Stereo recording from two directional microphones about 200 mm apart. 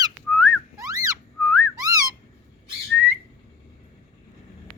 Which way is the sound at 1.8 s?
15° right (ahead or behind).